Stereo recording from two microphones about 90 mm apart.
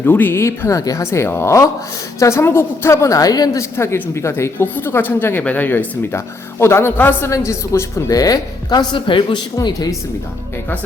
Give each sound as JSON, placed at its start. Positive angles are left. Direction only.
{"t": 0.0, "sound": "a woman's voice", "side_deg": 20}
{"t": 3.6, "sound": "speech", "side_deg": 30}
{"t": 7.3, "sound": "a woman's voice", "side_deg": 35}